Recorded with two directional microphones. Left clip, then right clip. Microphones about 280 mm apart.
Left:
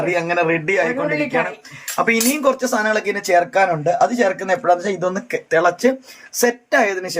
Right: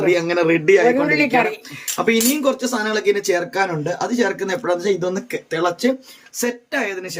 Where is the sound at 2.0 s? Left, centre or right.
Centre.